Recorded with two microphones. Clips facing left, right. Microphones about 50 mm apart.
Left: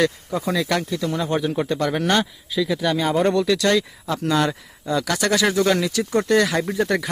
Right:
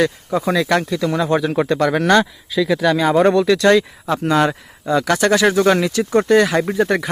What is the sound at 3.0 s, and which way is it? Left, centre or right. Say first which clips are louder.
Speech: right 5 dB; right.